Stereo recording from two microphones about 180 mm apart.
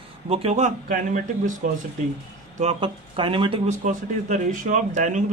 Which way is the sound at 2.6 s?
35° right (ahead or behind).